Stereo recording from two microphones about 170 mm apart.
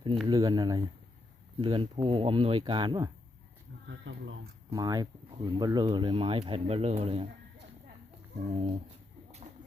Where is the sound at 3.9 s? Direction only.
90° right.